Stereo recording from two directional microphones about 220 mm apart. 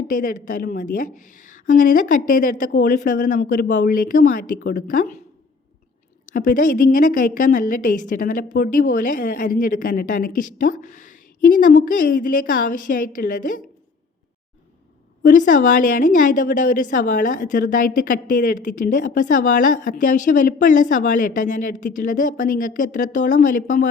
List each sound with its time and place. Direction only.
0.1 s a woman's voice: 40° left (ahead or behind)
6.2 s a woman's voice: 35° left (ahead or behind)
15.2 s a woman's voice: 35° left (ahead or behind)